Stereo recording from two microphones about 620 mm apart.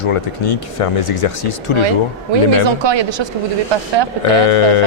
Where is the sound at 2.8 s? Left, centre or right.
Right.